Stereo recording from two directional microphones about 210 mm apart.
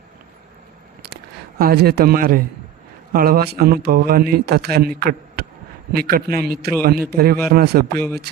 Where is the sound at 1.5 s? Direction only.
45° right (ahead or behind).